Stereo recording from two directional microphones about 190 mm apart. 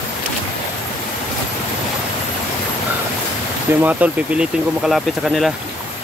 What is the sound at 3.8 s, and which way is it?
Speech, 5° right (ahead or behind).